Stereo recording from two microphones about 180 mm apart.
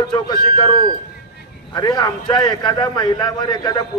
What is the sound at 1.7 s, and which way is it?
A man's voice, 20° left (ahead or behind).